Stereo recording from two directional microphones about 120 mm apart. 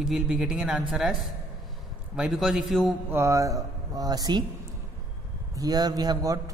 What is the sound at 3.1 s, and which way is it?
A man's voice, 25° right (ahead or behind).